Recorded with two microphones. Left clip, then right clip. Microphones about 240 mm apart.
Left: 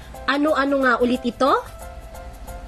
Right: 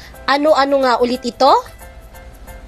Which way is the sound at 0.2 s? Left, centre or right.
Centre.